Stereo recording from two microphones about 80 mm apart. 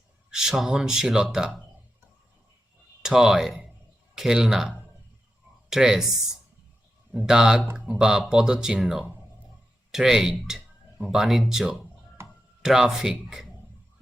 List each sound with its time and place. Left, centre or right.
0.3 s speech: centre
3.0 s speech: centre
5.7 s speech: centre
7.2 s speech: centre
12.2 s a sound: right
12.6 s speech: centre